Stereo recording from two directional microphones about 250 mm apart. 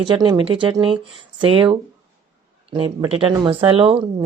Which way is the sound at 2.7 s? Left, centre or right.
Centre.